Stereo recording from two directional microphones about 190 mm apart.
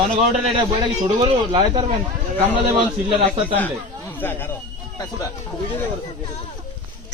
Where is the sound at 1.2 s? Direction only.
25° right (ahead or behind).